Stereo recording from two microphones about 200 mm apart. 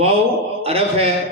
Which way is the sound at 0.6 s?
30° right (ahead or behind).